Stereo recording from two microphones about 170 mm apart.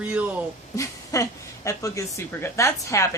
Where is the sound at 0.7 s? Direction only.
20° left (ahead or behind).